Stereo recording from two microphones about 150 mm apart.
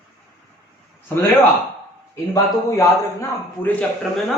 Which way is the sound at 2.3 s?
20° left (ahead or behind).